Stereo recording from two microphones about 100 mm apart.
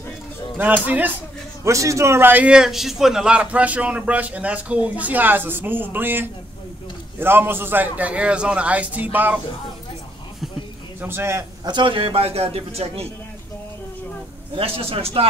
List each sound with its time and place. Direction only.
0.6 s a man's voice: 15° right (ahead or behind)
1.6 s a man's voice: 30° right (ahead or behind)
11.0 s a man's voice: 25° right (ahead or behind)
11.6 s a man's voice: 50° right (ahead or behind); by 13.0 s 90° right
14.5 s a man's voice: 70° right (ahead or behind)